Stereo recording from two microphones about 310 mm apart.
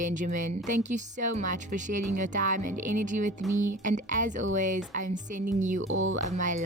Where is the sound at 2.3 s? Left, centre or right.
Right.